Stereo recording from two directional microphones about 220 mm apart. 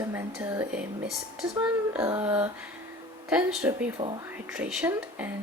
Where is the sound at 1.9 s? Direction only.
10° right (ahead or behind).